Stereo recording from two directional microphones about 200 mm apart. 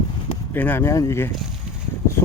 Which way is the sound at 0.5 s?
10° left (ahead or behind).